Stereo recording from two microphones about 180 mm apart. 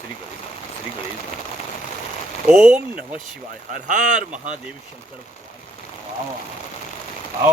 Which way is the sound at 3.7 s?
45° right (ahead or behind).